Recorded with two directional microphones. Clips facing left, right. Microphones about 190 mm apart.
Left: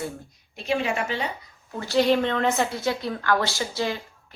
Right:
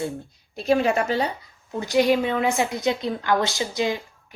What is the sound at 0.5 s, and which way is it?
Speech, 40° right (ahead or behind).